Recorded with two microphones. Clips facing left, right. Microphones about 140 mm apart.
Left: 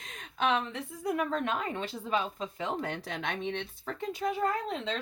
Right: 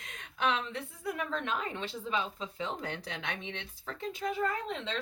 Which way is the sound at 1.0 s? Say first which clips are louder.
Left 5 dB; 45° left (ahead or behind).